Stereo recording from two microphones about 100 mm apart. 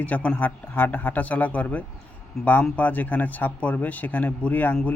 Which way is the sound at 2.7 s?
15° left (ahead or behind).